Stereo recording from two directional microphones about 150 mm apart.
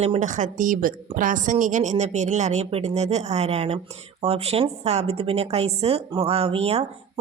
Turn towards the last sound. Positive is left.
turn(degrees=-40)  # may be behind; listen again after turning